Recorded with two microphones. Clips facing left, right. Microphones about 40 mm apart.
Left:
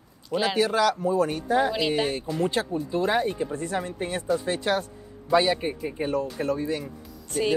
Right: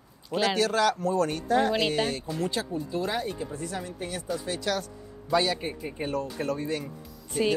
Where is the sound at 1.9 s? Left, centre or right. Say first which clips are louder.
Left 2 dB; centre.